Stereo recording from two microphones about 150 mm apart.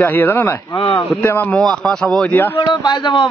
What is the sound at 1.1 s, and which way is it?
Speech, 10° left (ahead or behind).